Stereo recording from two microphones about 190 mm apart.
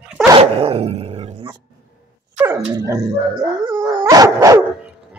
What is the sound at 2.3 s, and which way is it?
Dog, 10° right (ahead or behind).